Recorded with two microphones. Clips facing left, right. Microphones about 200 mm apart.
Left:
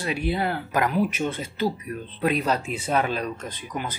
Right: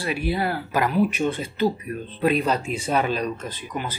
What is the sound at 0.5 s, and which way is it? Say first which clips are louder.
A man's voice: right 1 dB; 5° right (ahead or behind).